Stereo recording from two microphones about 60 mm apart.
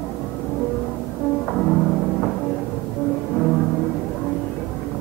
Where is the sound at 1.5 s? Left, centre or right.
Centre.